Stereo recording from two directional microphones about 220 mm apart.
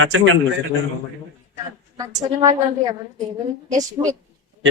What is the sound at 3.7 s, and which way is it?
Speech, 15° right (ahead or behind).